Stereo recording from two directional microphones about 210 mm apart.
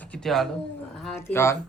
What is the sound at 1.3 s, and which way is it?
Speech, 10° left (ahead or behind).